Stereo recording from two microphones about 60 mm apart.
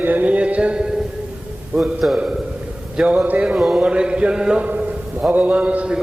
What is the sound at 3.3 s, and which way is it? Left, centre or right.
Speech, right.